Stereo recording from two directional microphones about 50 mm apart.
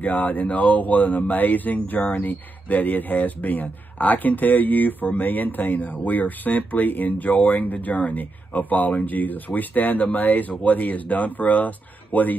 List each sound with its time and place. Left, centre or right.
0.0 s speech: left